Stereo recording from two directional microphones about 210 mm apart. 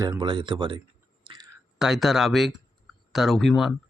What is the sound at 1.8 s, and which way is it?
Speech, centre (ahead or behind).